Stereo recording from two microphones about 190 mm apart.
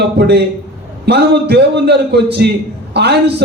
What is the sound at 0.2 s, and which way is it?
A man's voice, 60° right (ahead or behind).